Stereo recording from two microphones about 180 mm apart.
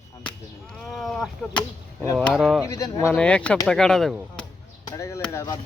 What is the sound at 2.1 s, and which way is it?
Speech, centre (ahead or behind).